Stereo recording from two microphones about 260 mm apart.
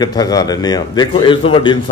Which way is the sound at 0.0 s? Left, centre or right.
Centre.